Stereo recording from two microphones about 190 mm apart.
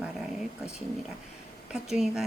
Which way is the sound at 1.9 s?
Centre (ahead or behind).